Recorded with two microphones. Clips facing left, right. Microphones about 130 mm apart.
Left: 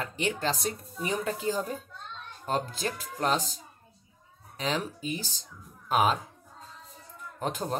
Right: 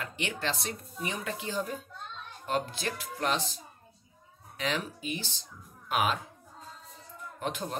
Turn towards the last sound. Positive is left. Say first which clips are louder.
# left 3 dB
turn(degrees=35)  # may be behind; listen again after turning